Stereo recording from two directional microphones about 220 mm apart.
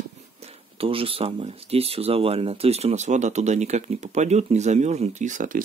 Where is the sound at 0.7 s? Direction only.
25° right (ahead or behind).